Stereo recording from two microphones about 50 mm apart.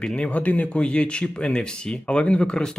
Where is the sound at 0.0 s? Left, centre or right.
Centre.